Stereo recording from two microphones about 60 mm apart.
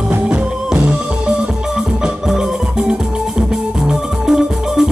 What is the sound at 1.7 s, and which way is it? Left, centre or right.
Organ, centre.